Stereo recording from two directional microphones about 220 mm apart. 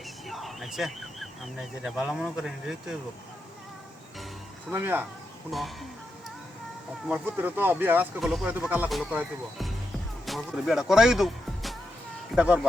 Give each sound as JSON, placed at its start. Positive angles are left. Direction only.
{"t": 0.3, "sound": "speech", "side_deg": 0}
{"t": 4.7, "sound": "speech", "side_deg": -10}
{"t": 7.1, "sound": "speech", "side_deg": -10}